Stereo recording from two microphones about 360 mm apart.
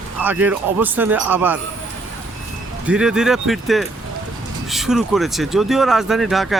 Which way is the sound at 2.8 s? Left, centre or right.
Centre.